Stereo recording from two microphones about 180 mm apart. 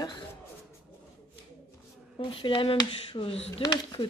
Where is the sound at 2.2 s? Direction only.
30° left (ahead or behind).